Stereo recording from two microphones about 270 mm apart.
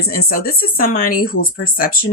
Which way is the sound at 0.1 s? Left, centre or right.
Left.